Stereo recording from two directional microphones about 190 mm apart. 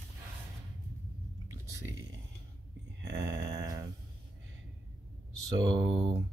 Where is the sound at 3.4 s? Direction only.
15° right (ahead or behind).